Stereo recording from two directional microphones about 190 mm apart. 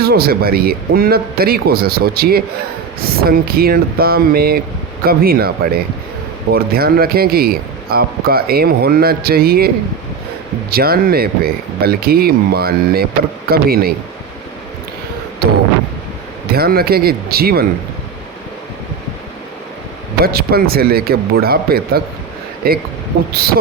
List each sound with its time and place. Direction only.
0.0 s speech: 55° right (ahead or behind)
16.5 s speech: 55° right (ahead or behind)
20.2 s speech: 55° right (ahead or behind)